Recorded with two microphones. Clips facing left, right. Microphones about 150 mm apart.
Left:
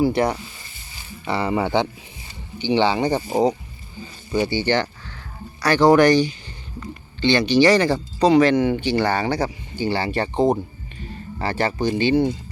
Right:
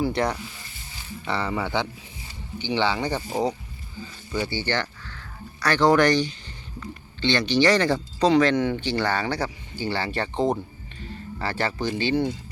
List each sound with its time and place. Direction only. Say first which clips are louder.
0.0 s speech: left 5 dB; 10° left (ahead or behind)